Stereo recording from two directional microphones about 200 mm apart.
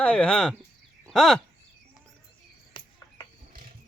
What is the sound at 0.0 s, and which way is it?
Speech, 5° left (ahead or behind).